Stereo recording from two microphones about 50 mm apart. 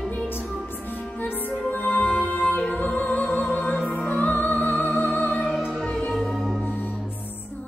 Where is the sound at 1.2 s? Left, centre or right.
Left.